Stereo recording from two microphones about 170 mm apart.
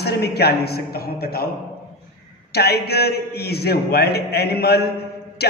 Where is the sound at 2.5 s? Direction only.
70° left (ahead or behind).